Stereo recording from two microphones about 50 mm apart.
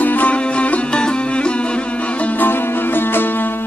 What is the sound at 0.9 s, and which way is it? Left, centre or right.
Music, centre.